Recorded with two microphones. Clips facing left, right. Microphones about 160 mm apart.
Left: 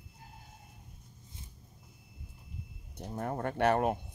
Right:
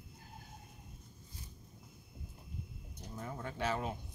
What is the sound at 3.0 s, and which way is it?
Speech, 65° left (ahead or behind).